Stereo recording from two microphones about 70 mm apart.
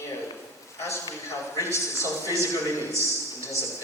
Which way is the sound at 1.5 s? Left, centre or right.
Left.